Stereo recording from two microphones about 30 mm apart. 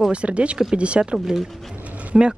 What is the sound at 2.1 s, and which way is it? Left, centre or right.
Speech, centre.